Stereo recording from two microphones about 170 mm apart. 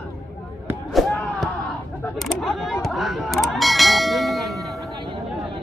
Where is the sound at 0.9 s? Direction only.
Centre (ahead or behind).